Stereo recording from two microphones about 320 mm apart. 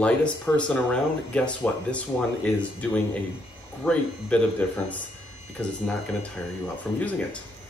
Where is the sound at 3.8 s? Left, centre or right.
Centre.